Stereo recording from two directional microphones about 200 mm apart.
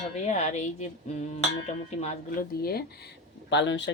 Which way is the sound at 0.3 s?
35° left (ahead or behind).